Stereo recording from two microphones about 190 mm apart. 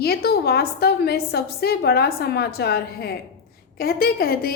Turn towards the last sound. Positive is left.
turn(degrees=55)  # may be behind; listen again after turning